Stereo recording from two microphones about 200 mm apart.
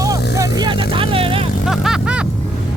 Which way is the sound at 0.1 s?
20° right (ahead or behind).